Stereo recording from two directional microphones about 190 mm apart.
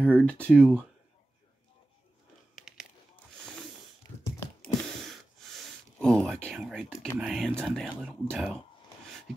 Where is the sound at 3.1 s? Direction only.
5° left (ahead or behind).